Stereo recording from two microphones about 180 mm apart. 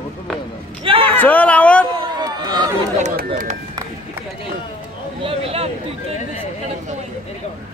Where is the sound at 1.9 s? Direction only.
25° right (ahead or behind).